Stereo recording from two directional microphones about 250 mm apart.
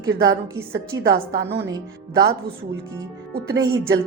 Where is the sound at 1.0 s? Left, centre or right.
Right.